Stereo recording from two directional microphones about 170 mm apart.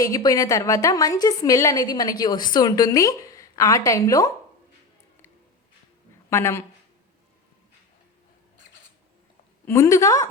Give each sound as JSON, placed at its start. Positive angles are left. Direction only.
{"t": 0.0, "sound": "a woman's voice", "side_deg": 20}
{"t": 6.3, "sound": "a woman's voice", "side_deg": 15}
{"t": 9.6, "sound": "a woman's voice", "side_deg": 15}